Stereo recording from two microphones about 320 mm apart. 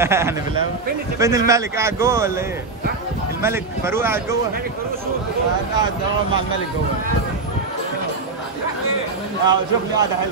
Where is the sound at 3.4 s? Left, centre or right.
Centre.